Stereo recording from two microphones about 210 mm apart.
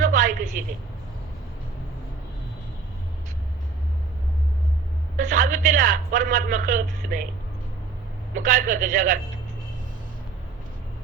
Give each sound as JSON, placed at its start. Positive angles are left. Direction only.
{"t": 0.0, "sound": "a sound", "side_deg": -40}
{"t": 5.1, "sound": "a man's voice", "side_deg": -40}
{"t": 8.4, "sound": "a man's voice", "side_deg": -40}